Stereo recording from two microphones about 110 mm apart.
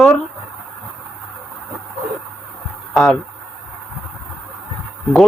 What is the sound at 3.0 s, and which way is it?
Speech, centre (ahead or behind).